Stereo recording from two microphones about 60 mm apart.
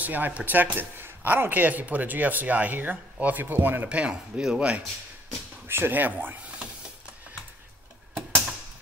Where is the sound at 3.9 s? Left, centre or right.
Centre.